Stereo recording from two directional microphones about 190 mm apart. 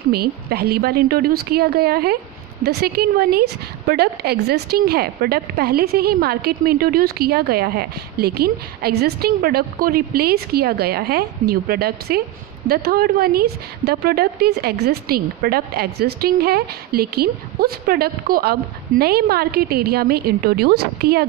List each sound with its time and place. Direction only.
0.1 s a woman's voice: 55° right (ahead or behind)